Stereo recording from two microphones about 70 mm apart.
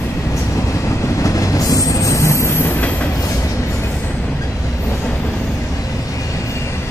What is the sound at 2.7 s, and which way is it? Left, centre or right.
Train, left.